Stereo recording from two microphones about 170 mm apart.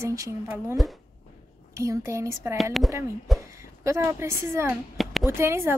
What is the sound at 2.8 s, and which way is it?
Speech, centre (ahead or behind).